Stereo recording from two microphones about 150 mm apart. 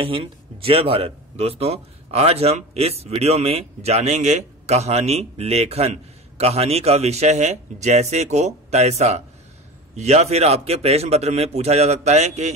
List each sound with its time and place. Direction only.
0.0 s speech: 35° right (ahead or behind)